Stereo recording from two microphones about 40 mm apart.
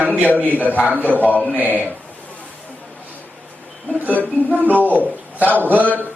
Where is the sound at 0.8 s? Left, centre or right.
Right.